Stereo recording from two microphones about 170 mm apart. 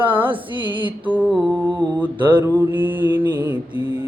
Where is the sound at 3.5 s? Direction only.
30° left (ahead or behind).